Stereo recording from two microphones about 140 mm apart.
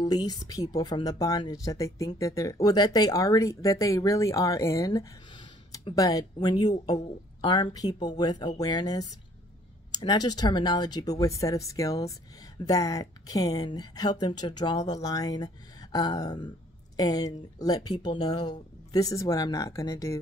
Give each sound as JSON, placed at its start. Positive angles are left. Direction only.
{"t": 0.0, "sound": "speech", "side_deg": 30}